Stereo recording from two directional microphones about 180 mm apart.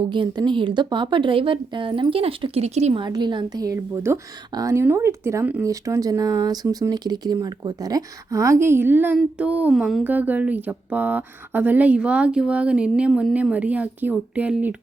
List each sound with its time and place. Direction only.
0.0 s a woman's voice: 25° right (ahead or behind)
3.0 s a woman's voice: 25° right (ahead or behind); by 14.8 s 5° right (ahead or behind)